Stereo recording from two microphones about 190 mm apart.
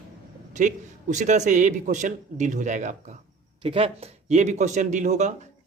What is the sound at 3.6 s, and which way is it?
Speech, 30° right (ahead or behind).